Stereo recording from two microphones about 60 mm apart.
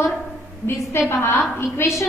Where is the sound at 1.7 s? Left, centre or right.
Left.